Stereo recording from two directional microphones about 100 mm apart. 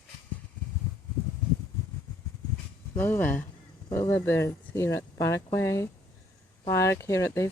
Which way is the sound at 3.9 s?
30° left (ahead or behind).